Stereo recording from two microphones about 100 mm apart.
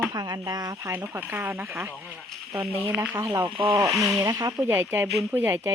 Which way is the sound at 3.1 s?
25° right (ahead or behind).